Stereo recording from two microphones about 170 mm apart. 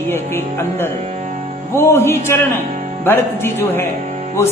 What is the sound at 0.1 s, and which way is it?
A man's voice, 15° left (ahead or behind).